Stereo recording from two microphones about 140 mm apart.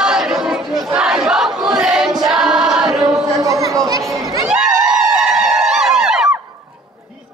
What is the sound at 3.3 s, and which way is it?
Chatter, 25° right (ahead or behind).